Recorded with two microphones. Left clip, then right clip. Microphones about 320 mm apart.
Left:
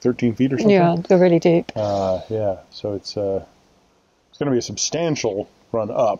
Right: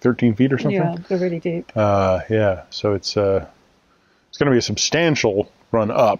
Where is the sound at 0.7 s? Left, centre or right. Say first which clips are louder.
Left 6 dB; left.